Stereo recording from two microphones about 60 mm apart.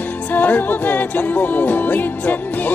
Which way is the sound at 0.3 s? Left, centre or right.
Left.